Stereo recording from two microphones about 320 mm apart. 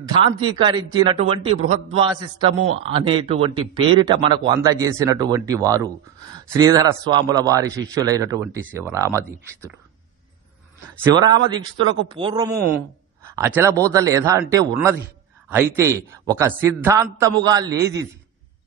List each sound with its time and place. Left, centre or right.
0.0 s a man's voice: centre
11.4 s a man's voice: centre